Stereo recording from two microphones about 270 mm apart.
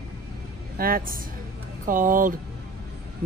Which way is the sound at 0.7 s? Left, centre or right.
Right.